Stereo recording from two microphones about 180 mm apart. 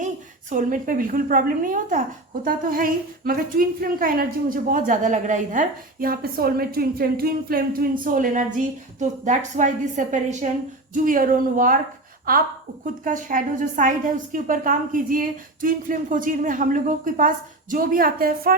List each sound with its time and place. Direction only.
0.5 s a woman's voice: 50° right (ahead or behind)
12.8 s a woman's voice: 45° right (ahead or behind)